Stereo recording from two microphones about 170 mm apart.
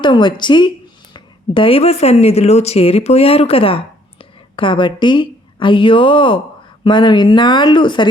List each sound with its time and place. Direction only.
0.0 s a woman's voice: 25° left (ahead or behind)